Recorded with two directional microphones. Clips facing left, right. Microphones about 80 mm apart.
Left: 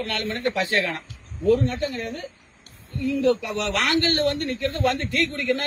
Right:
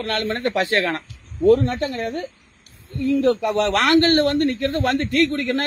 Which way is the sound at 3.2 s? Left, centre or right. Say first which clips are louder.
Right 2 dB; right.